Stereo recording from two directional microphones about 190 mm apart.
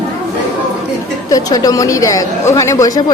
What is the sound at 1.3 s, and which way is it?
Speech, 20° left (ahead or behind).